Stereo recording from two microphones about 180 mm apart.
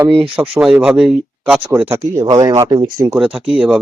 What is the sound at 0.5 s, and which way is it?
Speech, 5° right (ahead or behind).